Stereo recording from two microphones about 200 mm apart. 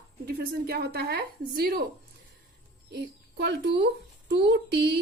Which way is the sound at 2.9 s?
55° right (ahead or behind).